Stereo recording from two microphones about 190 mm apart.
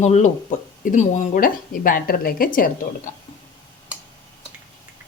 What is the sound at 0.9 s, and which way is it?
A woman's voice, 45° left (ahead or behind).